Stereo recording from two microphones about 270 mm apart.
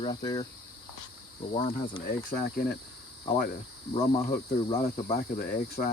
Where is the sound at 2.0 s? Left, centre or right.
Left.